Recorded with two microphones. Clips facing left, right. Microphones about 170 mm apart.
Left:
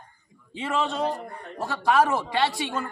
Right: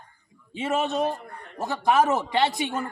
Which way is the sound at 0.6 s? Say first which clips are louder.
Right 2 dB; 20° right (ahead or behind).